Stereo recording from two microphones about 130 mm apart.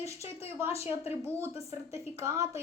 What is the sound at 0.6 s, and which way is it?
Speech, 20° right (ahead or behind).